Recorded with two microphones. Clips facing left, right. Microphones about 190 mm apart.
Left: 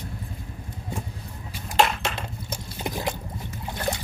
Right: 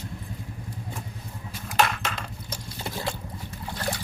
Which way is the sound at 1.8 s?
25° left (ahead or behind).